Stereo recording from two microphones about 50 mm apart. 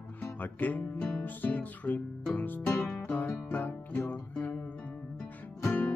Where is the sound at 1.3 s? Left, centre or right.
Left.